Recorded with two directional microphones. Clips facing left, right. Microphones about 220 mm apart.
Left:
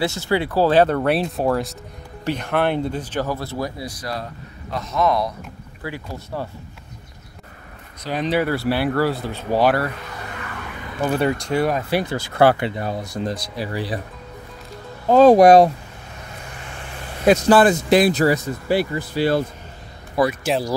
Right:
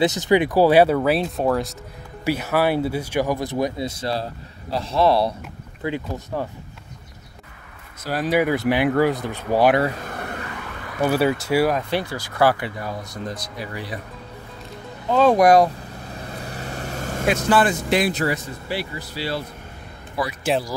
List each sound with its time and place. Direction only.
0.0 s speech: 20° right (ahead or behind)
5.8 s speech: 20° right (ahead or behind)
8.0 s speech: 5° right (ahead or behind)
10.0 s car: 55° right (ahead or behind)
11.1 s speech: 5° right (ahead or behind)
11.9 s speech: 20° left (ahead or behind)
15.0 s speech: 40° left (ahead or behind)
16.2 s vehicle: 35° right (ahead or behind)
17.5 s speech: 40° left (ahead or behind)